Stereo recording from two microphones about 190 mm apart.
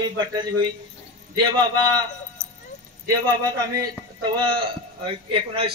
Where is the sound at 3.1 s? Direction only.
20° right (ahead or behind).